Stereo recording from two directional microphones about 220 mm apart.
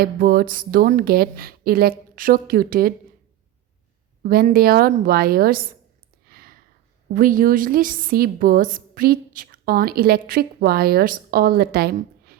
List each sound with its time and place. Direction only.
0.0 s a woman's voice: 40° right (ahead or behind)
4.2 s a woman's voice: 40° right (ahead or behind)
6.2 s a sound: 45° right (ahead or behind)
7.1 s a woman's voice: 40° right (ahead or behind)